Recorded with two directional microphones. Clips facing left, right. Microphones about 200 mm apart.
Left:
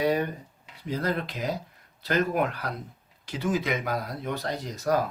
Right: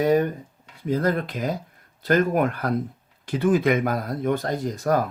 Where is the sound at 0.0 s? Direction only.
45° right (ahead or behind).